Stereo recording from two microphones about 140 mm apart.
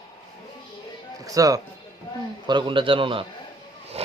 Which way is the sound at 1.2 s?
25° right (ahead or behind).